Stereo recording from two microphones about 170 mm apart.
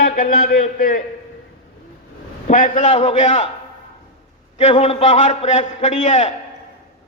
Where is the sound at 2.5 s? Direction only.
50° left (ahead or behind).